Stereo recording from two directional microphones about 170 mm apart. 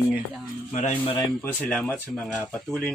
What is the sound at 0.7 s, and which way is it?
Speech, 45° left (ahead or behind).